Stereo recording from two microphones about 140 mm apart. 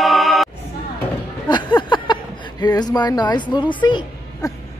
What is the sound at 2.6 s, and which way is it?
Speech, 30° left (ahead or behind).